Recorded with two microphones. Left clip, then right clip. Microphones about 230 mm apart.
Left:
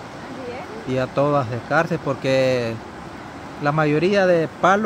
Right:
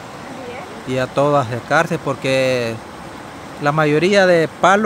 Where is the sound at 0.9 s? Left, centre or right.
Centre.